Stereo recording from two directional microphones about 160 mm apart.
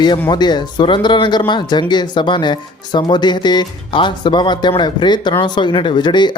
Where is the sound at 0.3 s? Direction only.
25° left (ahead or behind).